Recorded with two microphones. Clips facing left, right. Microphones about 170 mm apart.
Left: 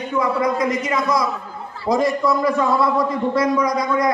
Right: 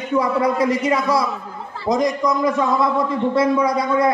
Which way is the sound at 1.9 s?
20° right (ahead or behind).